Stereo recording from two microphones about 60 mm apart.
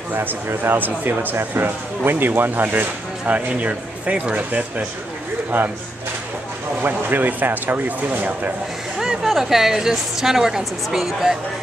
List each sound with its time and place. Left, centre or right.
0.1 s speech: right
6.8 s speech: right
8.9 s a woman's voice: centre